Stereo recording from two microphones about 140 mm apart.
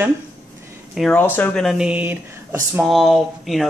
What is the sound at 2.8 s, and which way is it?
Speech, centre (ahead or behind).